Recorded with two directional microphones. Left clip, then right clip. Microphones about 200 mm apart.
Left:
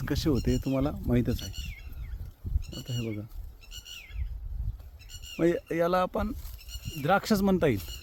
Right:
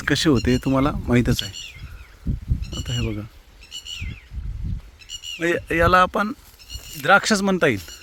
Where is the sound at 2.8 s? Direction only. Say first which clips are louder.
Right 9 dB; 10° right (ahead or behind).